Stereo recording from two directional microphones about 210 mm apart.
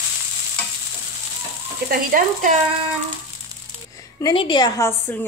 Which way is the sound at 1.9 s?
45° right (ahead or behind).